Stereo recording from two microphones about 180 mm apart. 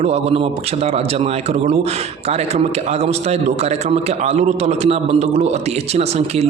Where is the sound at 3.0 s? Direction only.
35° right (ahead or behind).